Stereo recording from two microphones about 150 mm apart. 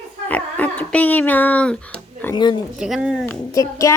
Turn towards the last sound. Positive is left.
turn(degrees=20)  # may be behind; listen again after turning